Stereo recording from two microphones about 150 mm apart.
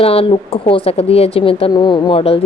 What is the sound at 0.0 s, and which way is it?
A woman's voice, 40° left (ahead or behind).